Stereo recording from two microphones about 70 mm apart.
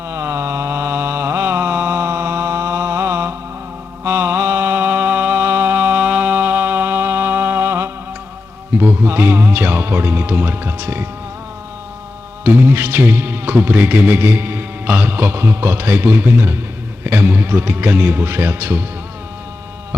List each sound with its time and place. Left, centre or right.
0.1 s mantra: right
8.8 s speech: right
12.5 s speech: right